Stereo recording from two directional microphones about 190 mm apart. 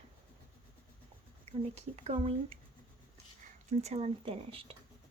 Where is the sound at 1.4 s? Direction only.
35° right (ahead or behind).